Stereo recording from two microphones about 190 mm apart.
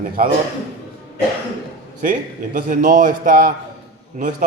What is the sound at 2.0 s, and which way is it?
A man's voice, 45° right (ahead or behind).